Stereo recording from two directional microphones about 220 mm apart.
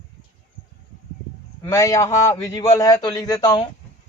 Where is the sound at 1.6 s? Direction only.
15° left (ahead or behind).